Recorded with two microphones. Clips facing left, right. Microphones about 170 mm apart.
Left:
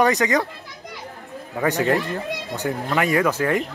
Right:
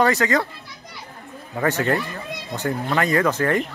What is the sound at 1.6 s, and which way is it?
Speech, 15° left (ahead or behind).